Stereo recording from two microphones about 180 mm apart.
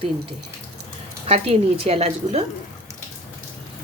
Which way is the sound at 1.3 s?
35° right (ahead or behind).